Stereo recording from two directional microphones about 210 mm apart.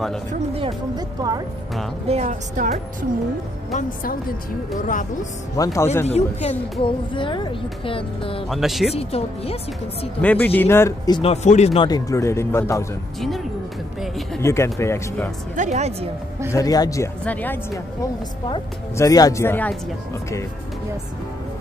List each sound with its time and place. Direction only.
0.3 s speech: 25° right (ahead or behind)
2.0 s a woman's voice: 35° right (ahead or behind)
3.7 s speech: 45° left (ahead or behind)
5.6 s speech: 15° left (ahead or behind)
6.0 s speech: 30° left (ahead or behind)
8.5 s speech: centre (ahead or behind)
8.9 s speech: 30° left (ahead or behind)
10.2 s speech: 10° left (ahead or behind)
11.1 s speech: 30° left (ahead or behind); by 12.8 s 15° left (ahead or behind)
13.2 s music: centre (ahead or behind)
14.4 s speech: 15° left (ahead or behind)
15.5 s a woman's voice: 35° right (ahead or behind)
16.5 s speech: 15° left (ahead or behind)